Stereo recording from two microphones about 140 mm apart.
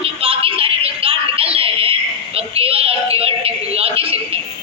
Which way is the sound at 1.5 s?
40° right (ahead or behind).